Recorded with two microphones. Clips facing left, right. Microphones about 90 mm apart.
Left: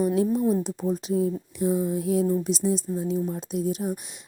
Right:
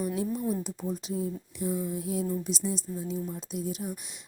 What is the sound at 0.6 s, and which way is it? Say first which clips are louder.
A woman's voice: left 7 dB; 65° left (ahead or behind).